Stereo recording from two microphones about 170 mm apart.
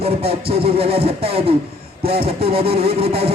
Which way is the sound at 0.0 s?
35° right (ahead or behind).